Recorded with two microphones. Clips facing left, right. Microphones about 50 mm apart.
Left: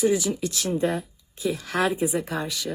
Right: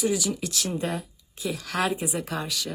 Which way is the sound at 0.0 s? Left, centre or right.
Left.